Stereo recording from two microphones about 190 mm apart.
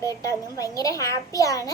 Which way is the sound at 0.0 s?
20° left (ahead or behind).